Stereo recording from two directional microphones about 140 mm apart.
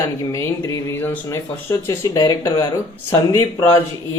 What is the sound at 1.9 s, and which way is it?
Speech, 25° left (ahead or behind).